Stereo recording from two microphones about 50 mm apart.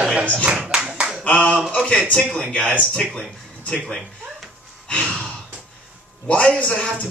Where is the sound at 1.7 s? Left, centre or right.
Centre.